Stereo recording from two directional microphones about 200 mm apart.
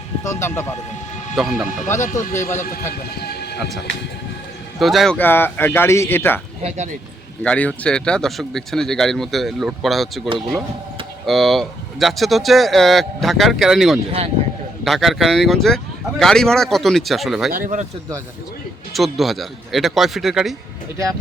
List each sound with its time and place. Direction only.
0.3 s speech: 15° left (ahead or behind)
1.4 s speech: centre (ahead or behind)
1.9 s speech: 15° left (ahead or behind)
3.2 s a sound: 55° left (ahead or behind)
4.8 s speech: centre (ahead or behind)
6.6 s speech: 35° right (ahead or behind)
7.4 s speech: 5° left (ahead or behind)
11.3 s speech: centre (ahead or behind)
17.5 s speech: 40° right (ahead or behind)
18.9 s speech: centre (ahead or behind)